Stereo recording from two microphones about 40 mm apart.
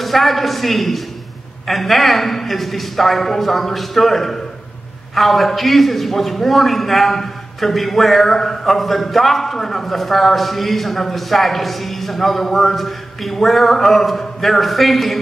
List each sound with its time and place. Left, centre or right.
0.0 s a man's voice: centre